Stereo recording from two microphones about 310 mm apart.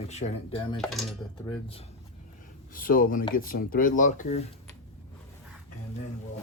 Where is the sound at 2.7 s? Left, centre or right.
Left.